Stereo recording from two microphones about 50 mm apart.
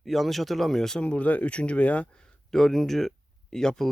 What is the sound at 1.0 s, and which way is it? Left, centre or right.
Speech, left.